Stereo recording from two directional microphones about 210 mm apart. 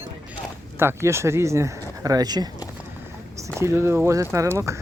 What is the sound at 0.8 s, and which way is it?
Speech, 10° right (ahead or behind).